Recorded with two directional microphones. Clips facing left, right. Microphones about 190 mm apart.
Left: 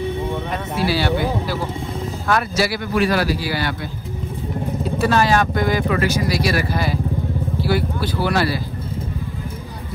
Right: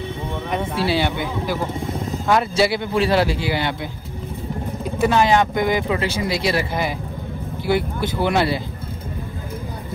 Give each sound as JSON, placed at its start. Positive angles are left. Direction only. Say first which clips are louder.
{"t": 0.8, "sound": "speech", "louder": "left 5 dB", "side_deg": -20}
{"t": 4.9, "sound": "speech", "louder": "right 1 dB", "side_deg": -15}